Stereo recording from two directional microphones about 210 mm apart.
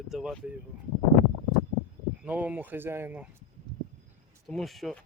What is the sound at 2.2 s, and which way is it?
Speech, 5° right (ahead or behind).